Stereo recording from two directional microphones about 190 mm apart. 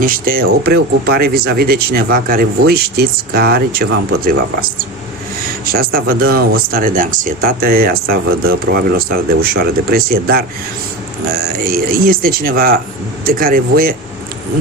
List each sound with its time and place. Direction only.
0.0 s speech: 50° right (ahead or behind)
5.6 s speech: 50° right (ahead or behind)